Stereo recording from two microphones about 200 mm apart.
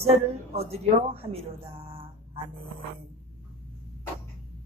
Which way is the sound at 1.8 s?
25° right (ahead or behind).